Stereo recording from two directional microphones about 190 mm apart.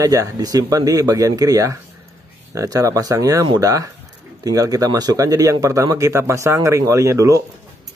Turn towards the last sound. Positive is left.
turn(degrees=-15)  # may be behind; listen again after turning